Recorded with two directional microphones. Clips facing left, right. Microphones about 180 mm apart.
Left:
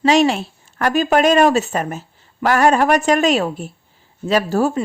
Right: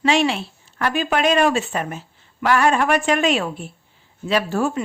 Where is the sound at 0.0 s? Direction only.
40° left (ahead or behind).